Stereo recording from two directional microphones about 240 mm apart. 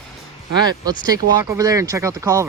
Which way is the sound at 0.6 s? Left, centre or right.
Centre.